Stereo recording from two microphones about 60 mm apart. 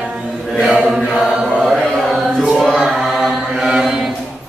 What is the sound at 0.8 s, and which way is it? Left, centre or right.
Chant, centre.